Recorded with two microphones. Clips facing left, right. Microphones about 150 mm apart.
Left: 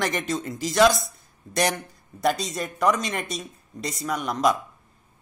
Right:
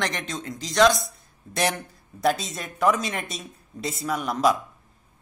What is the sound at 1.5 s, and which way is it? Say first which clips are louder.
Speech: left 5 dB; 15° left (ahead or behind).